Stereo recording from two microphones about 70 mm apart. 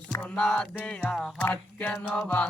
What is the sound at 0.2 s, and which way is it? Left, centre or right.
Music, centre.